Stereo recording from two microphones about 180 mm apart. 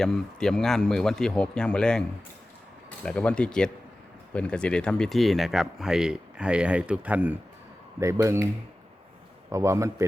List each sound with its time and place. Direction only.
0.0 s a man's voice: 5° left (ahead or behind); by 8.4 s 15° right (ahead or behind)
9.5 s a man's voice: 15° right (ahead or behind)